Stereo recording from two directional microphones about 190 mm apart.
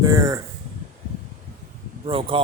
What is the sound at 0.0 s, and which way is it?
Speech, 20° right (ahead or behind).